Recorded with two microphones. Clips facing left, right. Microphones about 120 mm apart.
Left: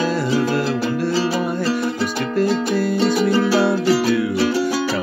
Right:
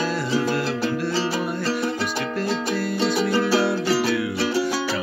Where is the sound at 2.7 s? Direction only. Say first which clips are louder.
Left 6 dB; 45° left (ahead or behind).